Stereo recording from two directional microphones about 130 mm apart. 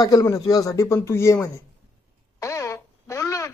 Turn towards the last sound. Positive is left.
turn(degrees=25)  # may be behind; listen again after turning